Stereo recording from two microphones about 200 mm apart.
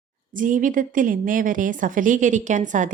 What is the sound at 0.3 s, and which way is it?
A woman's voice, 40° right (ahead or behind).